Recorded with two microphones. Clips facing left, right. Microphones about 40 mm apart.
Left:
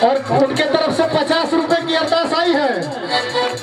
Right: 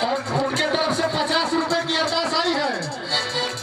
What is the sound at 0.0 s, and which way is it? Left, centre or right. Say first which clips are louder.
Speech: left 9 dB; left.